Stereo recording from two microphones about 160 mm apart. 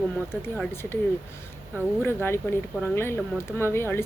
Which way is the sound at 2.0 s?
15° left (ahead or behind).